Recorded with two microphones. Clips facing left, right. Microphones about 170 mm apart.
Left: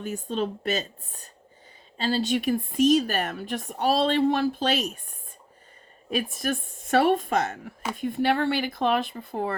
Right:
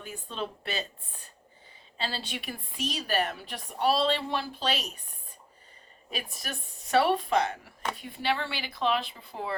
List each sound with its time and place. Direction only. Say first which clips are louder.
0.0 s a woman's voice: left 8 dB; 45° left (ahead or behind)
6.3 s a woman's voice: left 11 dB; 50° left (ahead or behind)